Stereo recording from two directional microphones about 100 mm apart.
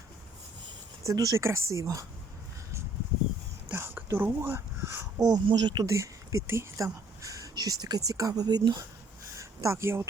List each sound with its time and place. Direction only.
1.0 s speech: 40° right (ahead or behind)
3.7 s a sound: 20° right (ahead or behind)
5.2 s speech: 45° right (ahead or behind)
5.9 s speech: 30° right (ahead or behind)
9.4 s speech: 30° right (ahead or behind)